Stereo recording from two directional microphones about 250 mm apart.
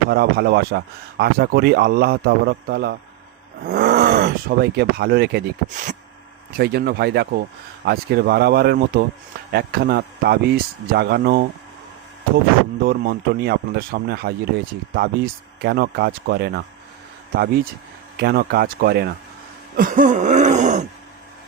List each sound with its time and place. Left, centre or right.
0.1 s speech: right
12.8 s speech: right
19.7 s throat clearing: right